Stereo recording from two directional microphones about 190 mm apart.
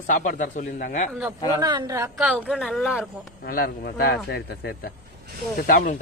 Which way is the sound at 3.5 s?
50° left (ahead or behind).